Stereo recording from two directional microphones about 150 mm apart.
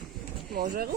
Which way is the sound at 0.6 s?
70° right (ahead or behind).